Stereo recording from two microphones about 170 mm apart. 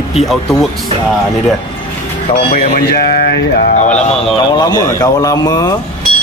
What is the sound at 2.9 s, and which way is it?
Speech, 70° left (ahead or behind).